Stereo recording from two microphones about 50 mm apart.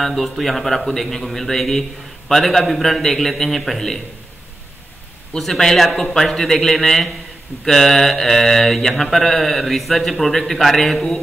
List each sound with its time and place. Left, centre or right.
0.0 s mantra: centre
5.4 s a man's voice: centre
7.6 s mantra: centre